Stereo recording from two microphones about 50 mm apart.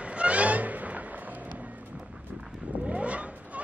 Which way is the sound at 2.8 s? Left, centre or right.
Right.